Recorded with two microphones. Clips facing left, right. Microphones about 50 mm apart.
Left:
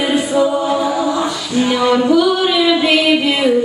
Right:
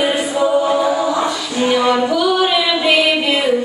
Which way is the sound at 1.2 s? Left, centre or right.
Centre.